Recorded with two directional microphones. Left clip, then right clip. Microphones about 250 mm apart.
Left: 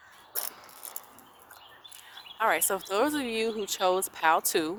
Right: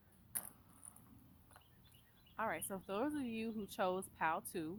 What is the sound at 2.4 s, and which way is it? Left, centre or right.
Speech, left.